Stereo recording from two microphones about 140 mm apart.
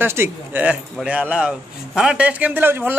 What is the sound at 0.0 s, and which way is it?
A man's voice, 15° right (ahead or behind).